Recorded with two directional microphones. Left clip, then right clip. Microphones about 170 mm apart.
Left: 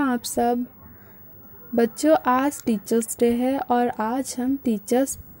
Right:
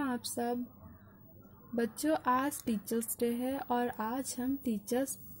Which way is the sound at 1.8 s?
40° left (ahead or behind).